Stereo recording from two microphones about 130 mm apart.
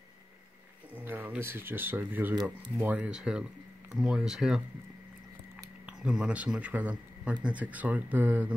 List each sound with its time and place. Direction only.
0.9 s speech: 15° right (ahead or behind)
5.9 s speech: 5° right (ahead or behind)